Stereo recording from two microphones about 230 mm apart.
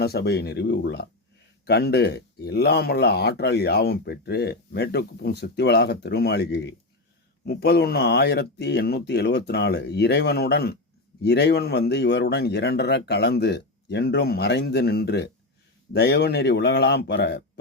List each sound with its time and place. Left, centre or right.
0.0 s speech: left